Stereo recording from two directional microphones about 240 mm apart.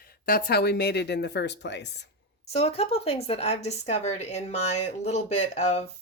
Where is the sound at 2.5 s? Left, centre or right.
Left.